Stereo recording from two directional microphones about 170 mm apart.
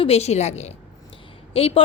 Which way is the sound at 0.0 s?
40° left (ahead or behind).